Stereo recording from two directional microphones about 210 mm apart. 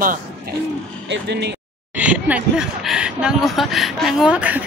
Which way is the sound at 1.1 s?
55° right (ahead or behind).